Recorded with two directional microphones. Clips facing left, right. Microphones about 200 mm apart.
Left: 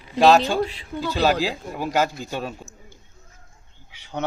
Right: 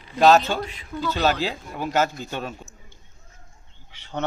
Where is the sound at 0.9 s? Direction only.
10° left (ahead or behind).